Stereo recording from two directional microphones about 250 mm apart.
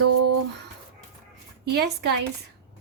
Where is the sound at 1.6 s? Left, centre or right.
Right.